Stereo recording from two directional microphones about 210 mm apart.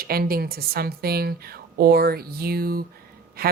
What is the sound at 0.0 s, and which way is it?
Speech, 45° right (ahead or behind).